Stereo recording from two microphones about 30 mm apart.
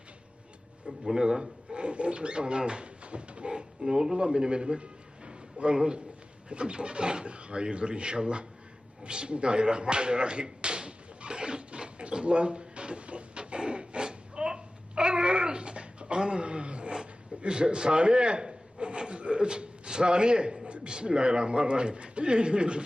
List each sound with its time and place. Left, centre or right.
1.1 s speech: right
3.8 s a man's voice: right
5.7 s a man's voice: right
6.5 s speech: right
9.0 s a sound: right
16.9 s a man's voice: right